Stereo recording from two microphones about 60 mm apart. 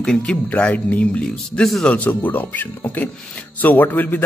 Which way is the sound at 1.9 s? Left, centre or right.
Left.